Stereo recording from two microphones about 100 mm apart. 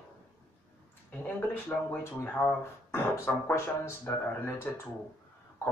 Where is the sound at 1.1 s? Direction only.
25° left (ahead or behind).